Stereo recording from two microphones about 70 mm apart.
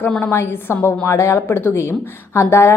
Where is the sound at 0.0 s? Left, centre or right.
Left.